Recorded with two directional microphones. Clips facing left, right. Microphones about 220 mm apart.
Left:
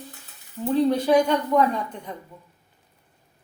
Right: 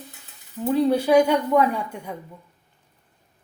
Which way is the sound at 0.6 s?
10° right (ahead or behind).